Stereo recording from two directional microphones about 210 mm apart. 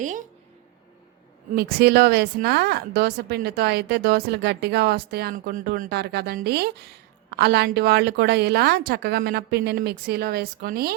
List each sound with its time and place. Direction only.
0.0 s a woman's voice: 35° right (ahead or behind)
1.5 s a woman's voice: 45° right (ahead or behind)